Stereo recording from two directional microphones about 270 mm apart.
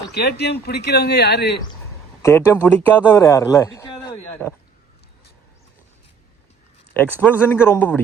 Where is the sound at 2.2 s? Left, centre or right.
Centre.